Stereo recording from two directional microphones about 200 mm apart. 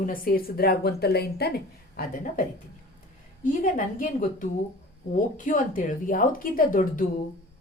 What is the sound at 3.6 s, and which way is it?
Speech, 45° left (ahead or behind).